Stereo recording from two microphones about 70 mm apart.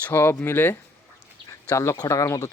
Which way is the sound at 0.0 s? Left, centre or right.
Left.